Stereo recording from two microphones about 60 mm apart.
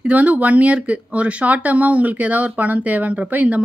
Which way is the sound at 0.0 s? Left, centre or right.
Right.